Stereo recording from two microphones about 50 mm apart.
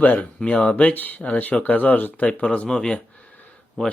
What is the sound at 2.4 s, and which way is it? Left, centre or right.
Speech, left.